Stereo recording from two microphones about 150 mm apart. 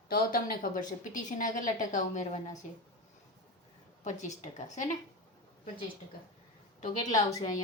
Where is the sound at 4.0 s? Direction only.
55° left (ahead or behind).